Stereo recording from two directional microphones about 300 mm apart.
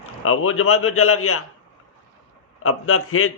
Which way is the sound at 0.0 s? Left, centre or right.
Left.